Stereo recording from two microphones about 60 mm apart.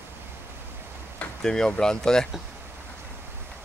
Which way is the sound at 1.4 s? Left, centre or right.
Centre.